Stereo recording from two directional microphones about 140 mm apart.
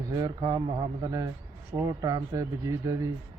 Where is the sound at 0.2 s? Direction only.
30° right (ahead or behind).